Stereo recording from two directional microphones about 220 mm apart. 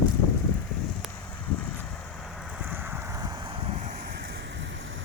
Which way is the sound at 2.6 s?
10° right (ahead or behind).